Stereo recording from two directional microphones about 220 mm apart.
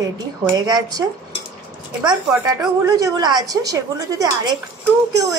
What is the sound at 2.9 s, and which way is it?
Speech, 20° right (ahead or behind).